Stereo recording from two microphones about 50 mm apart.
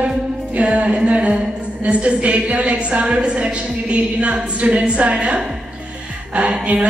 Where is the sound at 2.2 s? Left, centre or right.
Right.